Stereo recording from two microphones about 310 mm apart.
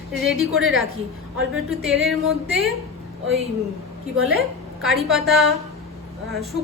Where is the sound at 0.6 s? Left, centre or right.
Right.